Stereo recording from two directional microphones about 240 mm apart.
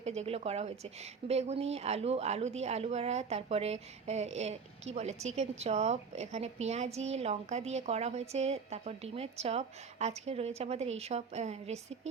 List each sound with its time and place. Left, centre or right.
0.0 s speech: right